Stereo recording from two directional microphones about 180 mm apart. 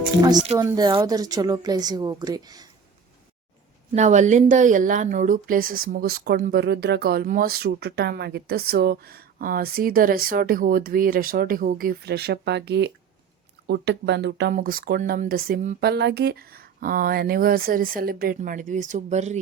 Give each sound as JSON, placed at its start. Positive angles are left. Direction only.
{"t": 0.3, "sound": "speech", "side_deg": -35}
{"t": 0.6, "sound": "a woman's voice", "side_deg": -20}
{"t": 3.9, "sound": "speech", "side_deg": -40}